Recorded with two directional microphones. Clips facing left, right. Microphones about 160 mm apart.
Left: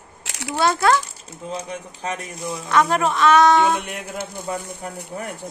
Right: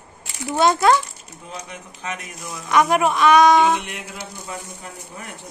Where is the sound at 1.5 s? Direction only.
30° left (ahead or behind).